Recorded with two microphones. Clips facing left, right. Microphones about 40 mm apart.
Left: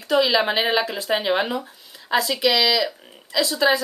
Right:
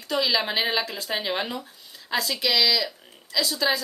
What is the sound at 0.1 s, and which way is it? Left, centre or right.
Speech, centre.